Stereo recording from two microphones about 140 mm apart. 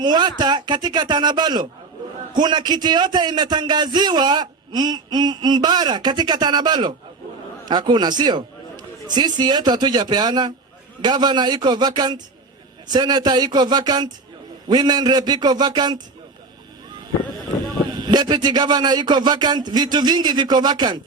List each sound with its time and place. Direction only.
0.0 s a man's voice: 30° right (ahead or behind)
18.1 s a man's voice: 30° right (ahead or behind)